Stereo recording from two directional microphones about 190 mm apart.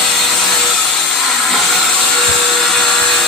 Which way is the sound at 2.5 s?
Centre (ahead or behind).